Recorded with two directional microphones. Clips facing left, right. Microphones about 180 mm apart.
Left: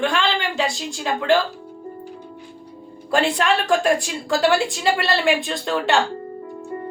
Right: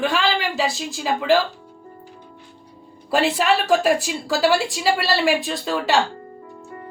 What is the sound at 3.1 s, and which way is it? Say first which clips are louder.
A woman's voice: even; 5° right (ahead or behind).